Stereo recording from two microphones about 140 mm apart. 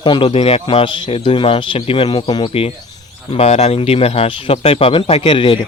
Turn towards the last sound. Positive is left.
turn(degrees=35)  # may be behind; listen again after turning